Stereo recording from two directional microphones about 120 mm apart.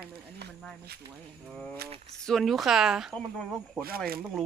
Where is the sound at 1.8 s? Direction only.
55° right (ahead or behind).